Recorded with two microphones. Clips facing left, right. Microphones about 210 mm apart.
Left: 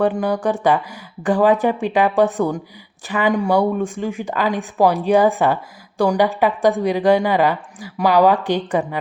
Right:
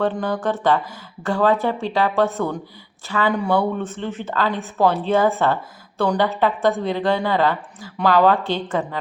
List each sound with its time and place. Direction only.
0.0 s a woman's voice: 15° left (ahead or behind)